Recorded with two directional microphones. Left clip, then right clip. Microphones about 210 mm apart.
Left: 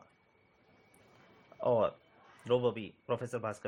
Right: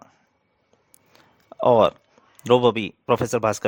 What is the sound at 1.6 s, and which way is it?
Speech, 60° right (ahead or behind).